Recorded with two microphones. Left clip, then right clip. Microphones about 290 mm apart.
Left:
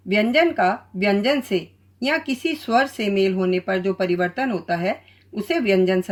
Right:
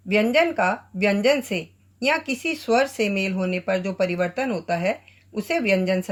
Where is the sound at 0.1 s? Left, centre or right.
Right.